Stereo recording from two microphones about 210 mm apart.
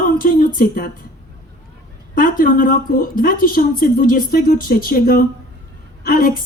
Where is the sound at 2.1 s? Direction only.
40° left (ahead or behind).